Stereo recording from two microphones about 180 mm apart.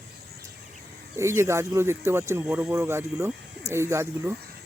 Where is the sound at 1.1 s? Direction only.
15° right (ahead or behind).